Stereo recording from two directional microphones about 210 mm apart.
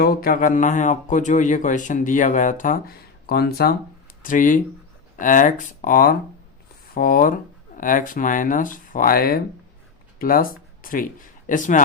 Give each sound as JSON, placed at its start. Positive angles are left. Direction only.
{"t": 0.0, "sound": "speech", "side_deg": 45}